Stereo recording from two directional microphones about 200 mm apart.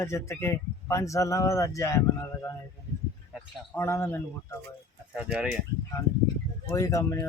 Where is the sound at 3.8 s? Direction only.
15° left (ahead or behind).